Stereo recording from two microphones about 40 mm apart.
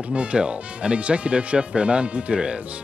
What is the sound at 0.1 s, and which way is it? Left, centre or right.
Speech, right.